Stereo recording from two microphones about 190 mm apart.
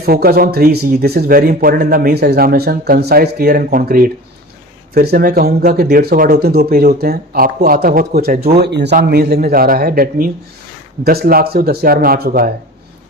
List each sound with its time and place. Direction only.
0.0 s speech: 55° right (ahead or behind)